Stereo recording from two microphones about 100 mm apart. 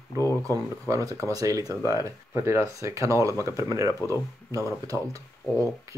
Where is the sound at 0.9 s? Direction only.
30° right (ahead or behind).